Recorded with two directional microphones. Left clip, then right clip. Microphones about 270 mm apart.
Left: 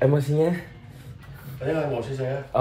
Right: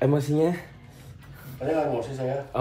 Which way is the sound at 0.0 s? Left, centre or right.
Centre.